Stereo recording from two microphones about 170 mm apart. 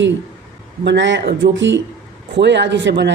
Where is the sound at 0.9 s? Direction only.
90° right.